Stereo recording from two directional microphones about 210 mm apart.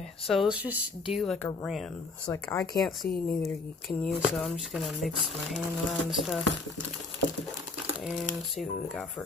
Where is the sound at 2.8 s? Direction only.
Centre (ahead or behind).